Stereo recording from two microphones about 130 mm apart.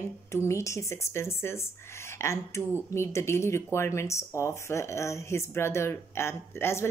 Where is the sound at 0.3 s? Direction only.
20° left (ahead or behind).